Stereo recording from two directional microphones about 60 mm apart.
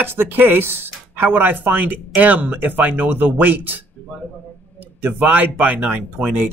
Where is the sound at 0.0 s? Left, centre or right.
Right.